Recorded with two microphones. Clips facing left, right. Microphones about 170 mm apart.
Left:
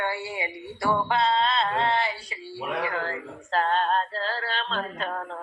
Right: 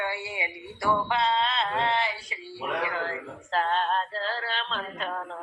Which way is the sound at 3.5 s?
40° left (ahead or behind).